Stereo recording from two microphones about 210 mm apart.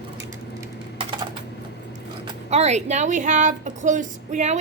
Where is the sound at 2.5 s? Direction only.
30° right (ahead or behind).